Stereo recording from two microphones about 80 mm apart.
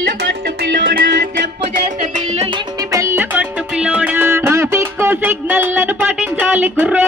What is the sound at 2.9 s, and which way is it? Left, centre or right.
Music, right.